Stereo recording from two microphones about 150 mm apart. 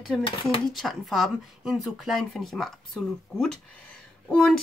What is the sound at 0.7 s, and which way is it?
Speech, centre (ahead or behind).